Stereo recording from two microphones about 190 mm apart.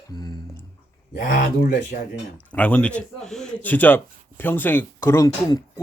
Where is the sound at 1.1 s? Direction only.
45° left (ahead or behind).